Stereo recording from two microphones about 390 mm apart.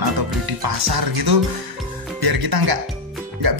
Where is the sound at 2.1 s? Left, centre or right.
Right.